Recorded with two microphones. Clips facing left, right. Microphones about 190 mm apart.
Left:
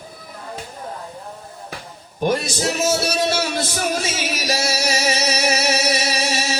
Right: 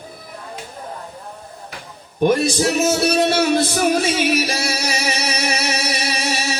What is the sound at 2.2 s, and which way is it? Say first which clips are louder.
Music: right 4 dB; 60° right (ahead or behind).